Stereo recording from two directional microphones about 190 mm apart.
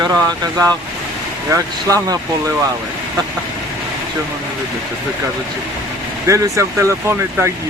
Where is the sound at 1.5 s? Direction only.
15° right (ahead or behind).